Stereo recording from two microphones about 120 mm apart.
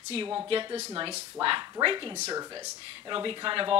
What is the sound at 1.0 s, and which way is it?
Speech, 50° right (ahead or behind).